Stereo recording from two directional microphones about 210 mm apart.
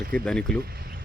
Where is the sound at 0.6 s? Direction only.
45° right (ahead or behind).